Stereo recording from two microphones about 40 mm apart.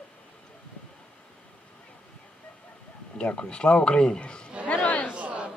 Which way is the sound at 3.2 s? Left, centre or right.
Left.